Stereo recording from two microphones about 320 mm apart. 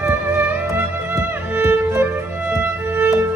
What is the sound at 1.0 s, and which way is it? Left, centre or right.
Music, centre.